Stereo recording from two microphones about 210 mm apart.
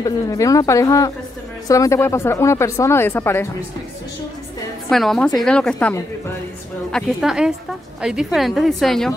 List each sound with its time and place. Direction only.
0.0 s a woman's voice: 15° left (ahead or behind)
4.8 s a woman's voice: centre (ahead or behind)